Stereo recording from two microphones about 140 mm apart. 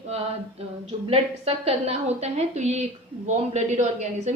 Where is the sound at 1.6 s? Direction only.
50° right (ahead or behind).